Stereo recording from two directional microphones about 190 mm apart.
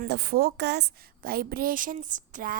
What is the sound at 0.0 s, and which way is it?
A woman's voice, 55° right (ahead or behind).